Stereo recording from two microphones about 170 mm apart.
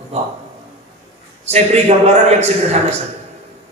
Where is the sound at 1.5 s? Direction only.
40° right (ahead or behind).